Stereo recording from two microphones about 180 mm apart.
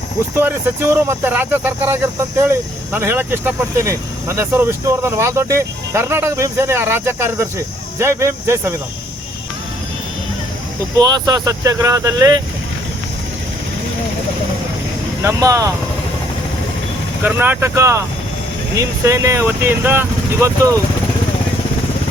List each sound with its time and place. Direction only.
0.3 s speech: 10° right (ahead or behind)
10.9 s speech: 20° right (ahead or behind)
15.2 s speech: 20° right (ahead or behind)
17.2 s speech: 10° right (ahead or behind)